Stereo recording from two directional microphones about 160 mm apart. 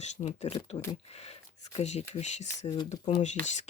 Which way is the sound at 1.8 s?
45° left (ahead or behind).